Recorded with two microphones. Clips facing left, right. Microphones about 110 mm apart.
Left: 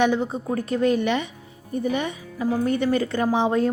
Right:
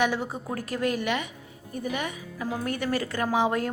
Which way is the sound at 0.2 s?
10° right (ahead or behind).